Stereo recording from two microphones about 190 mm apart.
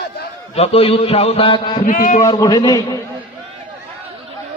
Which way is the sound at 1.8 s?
45° left (ahead or behind).